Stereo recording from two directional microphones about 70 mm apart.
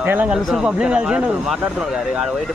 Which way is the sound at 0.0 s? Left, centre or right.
Right.